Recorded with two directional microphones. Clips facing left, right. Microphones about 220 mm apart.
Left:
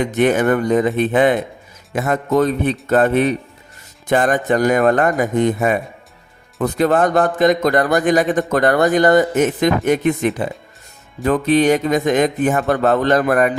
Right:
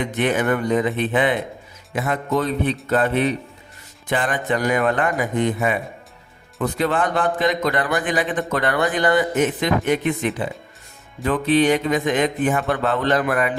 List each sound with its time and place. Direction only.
0.0 s a man's voice: 45° left (ahead or behind)